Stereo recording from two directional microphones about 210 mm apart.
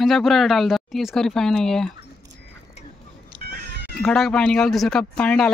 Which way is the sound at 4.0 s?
5° left (ahead or behind).